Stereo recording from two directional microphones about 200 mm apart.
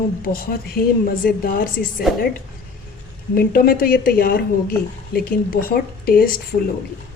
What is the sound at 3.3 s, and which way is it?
Speech, 45° left (ahead or behind).